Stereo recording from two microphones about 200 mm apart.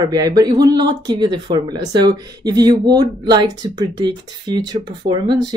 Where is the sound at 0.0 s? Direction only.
20° right (ahead or behind).